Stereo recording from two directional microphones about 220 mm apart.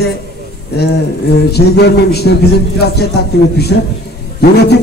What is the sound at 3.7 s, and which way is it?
Speech, 60° left (ahead or behind).